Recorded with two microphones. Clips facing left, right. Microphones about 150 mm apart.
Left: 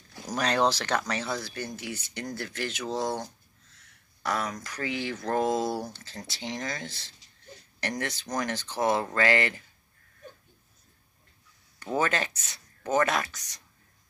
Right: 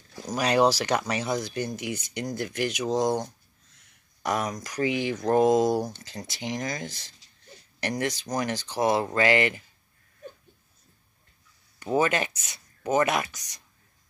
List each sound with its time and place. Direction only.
0.3 s speech: 10° right (ahead or behind)
11.8 s speech: 15° right (ahead or behind)